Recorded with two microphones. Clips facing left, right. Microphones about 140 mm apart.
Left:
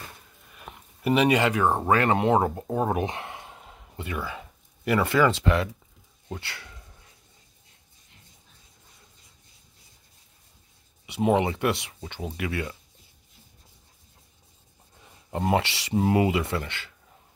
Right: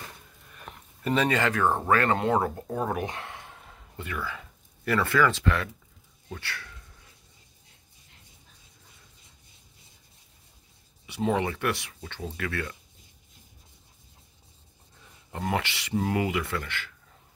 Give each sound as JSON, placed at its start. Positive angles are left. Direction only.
{"t": 0.5, "sound": "speech", "side_deg": 5}
{"t": 11.1, "sound": "speech", "side_deg": 20}
{"t": 15.3, "sound": "speech", "side_deg": 25}